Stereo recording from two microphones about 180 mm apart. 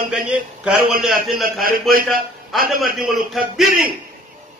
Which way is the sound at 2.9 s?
Centre (ahead or behind).